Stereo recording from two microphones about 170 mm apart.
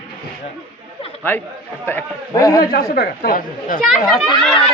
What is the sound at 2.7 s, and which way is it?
Speech, 65° left (ahead or behind).